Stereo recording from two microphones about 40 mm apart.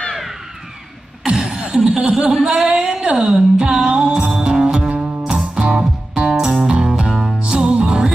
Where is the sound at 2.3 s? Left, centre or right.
Centre.